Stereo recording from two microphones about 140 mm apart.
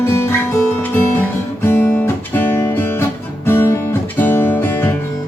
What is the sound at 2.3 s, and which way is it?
Music, 15° left (ahead or behind).